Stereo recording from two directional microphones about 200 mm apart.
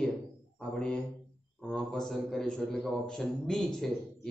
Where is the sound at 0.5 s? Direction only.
5° left (ahead or behind).